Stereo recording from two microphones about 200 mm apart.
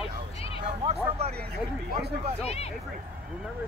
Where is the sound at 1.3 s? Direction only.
50° right (ahead or behind).